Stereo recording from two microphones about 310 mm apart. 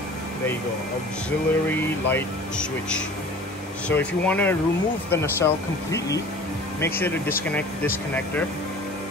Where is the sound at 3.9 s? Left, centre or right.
Centre.